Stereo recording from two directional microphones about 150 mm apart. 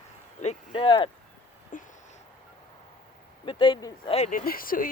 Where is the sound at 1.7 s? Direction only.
60° left (ahead or behind).